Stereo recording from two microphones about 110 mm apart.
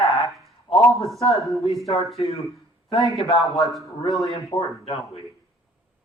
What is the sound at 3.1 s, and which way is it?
Speech, centre (ahead or behind).